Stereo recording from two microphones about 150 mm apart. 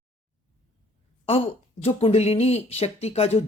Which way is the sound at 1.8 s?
40° left (ahead or behind).